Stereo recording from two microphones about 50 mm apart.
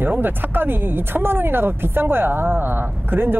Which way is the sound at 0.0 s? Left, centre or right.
Right.